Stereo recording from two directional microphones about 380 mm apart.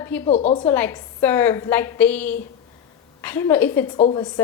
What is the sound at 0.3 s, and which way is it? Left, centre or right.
Speech, centre.